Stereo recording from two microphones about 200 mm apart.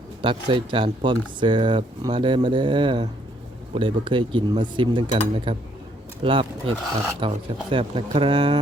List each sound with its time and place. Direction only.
0.2 s speech: 25° right (ahead or behind)